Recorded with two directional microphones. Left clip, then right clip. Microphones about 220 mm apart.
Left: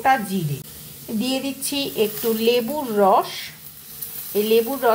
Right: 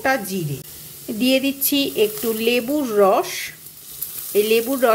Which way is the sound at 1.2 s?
20° right (ahead or behind).